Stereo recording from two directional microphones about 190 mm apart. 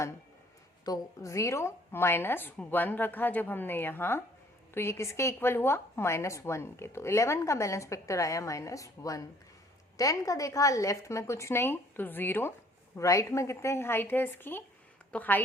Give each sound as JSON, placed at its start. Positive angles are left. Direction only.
{"t": 0.9, "sound": "a woman's voice", "side_deg": 15}